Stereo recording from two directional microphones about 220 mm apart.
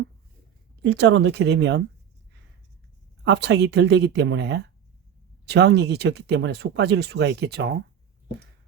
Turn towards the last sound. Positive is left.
turn(degrees=-45)  # may be behind; listen again after turning